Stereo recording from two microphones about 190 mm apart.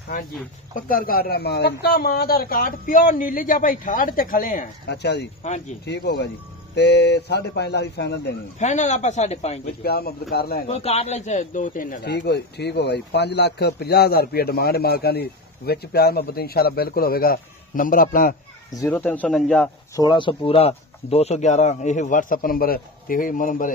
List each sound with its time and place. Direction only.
0.7 s speech: 45° left (ahead or behind)
4.8 s speech: 60° left (ahead or behind)
5.4 s speech: 40° left (ahead or behind)
5.9 s speech: 60° left (ahead or behind)
8.5 s speech: 40° left (ahead or behind)
9.8 s speech: 55° left (ahead or behind)
10.7 s speech: 35° left (ahead or behind)
18.7 s speech: 15° left (ahead or behind)
20.0 s speech: 25° left (ahead or behind); by 23.7 s 45° left (ahead or behind)